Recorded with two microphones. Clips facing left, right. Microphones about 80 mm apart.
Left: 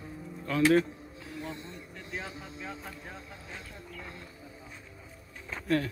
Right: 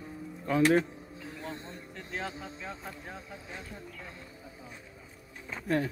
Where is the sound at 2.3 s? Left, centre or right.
Right.